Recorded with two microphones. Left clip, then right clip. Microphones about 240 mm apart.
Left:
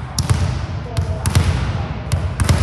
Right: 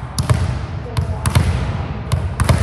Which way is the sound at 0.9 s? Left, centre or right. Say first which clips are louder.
Right 2 dB; centre.